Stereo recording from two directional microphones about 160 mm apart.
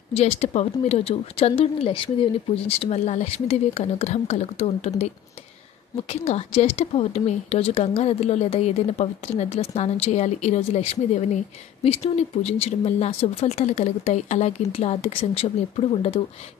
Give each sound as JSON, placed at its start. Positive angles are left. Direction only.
{"t": 0.1, "sound": "speech", "side_deg": 40}
{"t": 6.0, "sound": "speech", "side_deg": 40}